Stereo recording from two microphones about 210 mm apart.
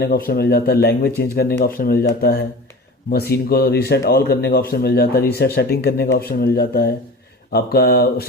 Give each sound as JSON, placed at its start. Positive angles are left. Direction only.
{"t": 0.0, "sound": "speech", "side_deg": 45}